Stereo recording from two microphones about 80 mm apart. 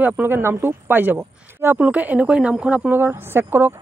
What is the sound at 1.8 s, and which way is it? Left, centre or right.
Speech, centre.